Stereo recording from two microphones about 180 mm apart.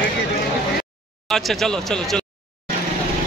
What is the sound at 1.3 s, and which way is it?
Speech, centre (ahead or behind).